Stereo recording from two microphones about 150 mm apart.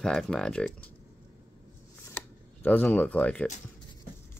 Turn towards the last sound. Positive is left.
turn(degrees=10)  # may be behind; listen again after turning